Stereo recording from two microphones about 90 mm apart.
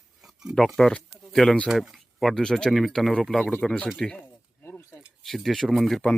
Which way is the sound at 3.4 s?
20° left (ahead or behind).